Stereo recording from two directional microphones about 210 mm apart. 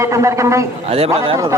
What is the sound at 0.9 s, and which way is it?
Speech, 30° right (ahead or behind).